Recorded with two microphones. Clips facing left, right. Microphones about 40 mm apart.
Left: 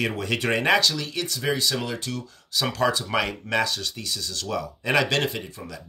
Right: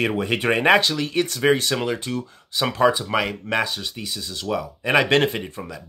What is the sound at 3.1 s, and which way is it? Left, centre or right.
Speech, centre.